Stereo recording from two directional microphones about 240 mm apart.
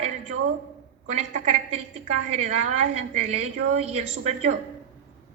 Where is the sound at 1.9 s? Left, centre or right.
Right.